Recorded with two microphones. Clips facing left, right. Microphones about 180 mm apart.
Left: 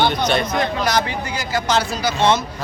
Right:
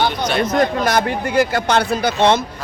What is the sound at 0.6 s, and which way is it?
Speech, 55° right (ahead or behind).